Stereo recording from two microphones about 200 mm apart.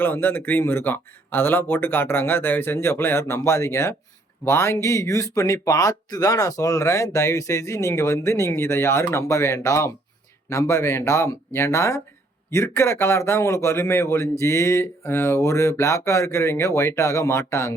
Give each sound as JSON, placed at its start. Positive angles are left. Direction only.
{"t": 0.0, "sound": "speech", "side_deg": 10}